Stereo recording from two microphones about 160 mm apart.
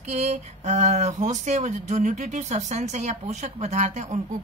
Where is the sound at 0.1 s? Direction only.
45° right (ahead or behind).